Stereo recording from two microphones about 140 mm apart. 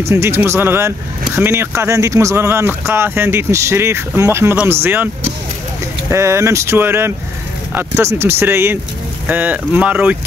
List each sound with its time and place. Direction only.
0.0 s speech: 20° right (ahead or behind)